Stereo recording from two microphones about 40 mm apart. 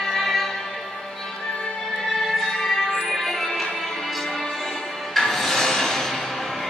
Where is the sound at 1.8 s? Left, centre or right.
Centre.